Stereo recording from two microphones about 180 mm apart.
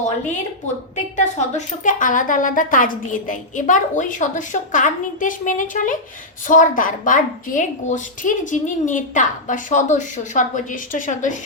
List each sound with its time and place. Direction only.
1.1 s a woman's voice: 40° left (ahead or behind)